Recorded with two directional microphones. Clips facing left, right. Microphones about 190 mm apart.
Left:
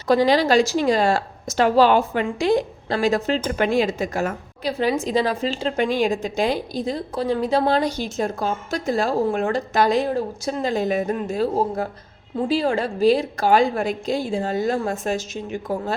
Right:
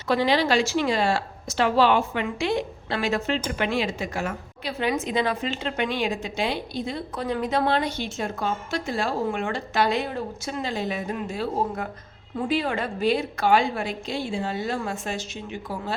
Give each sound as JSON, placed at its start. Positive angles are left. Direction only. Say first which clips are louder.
{"t": 0.1, "sound": "a woman's voice", "louder": "left 5 dB", "side_deg": 40}